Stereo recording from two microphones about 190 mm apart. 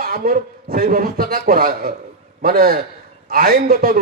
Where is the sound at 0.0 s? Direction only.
50° right (ahead or behind).